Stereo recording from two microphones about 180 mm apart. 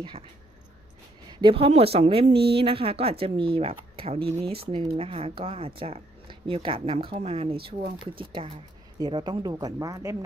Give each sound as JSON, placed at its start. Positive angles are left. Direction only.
{"t": 1.4, "sound": "speech", "side_deg": -30}